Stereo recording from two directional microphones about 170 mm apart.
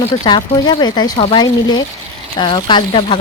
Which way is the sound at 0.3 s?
25° left (ahead or behind).